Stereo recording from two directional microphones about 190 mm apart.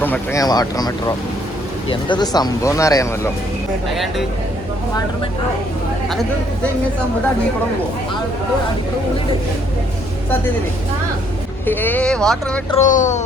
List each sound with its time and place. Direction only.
0.0 s speech: 10° left (ahead or behind)
6.1 s speech: centre (ahead or behind)
11.6 s speech: 10° left (ahead or behind)
12.7 s speech: 40° left (ahead or behind)